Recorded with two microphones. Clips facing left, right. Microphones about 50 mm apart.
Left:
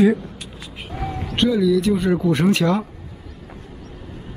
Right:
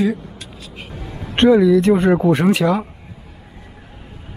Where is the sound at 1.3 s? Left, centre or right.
Right.